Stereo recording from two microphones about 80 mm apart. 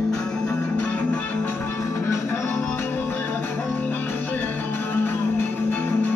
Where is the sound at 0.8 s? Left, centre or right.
Centre.